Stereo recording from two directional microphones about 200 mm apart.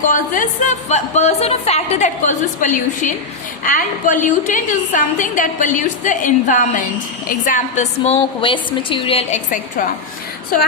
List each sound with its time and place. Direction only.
0.0 s a woman's voice: 40° left (ahead or behind)